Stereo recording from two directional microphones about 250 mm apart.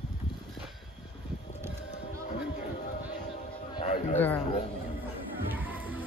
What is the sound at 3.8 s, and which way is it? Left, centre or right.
Chatter, left.